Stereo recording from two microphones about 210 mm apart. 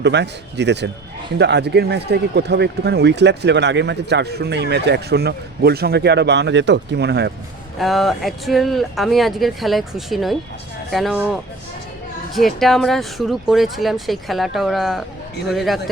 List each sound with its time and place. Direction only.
0.0 s speech: 55° right (ahead or behind)
7.8 s speech: centre (ahead or behind)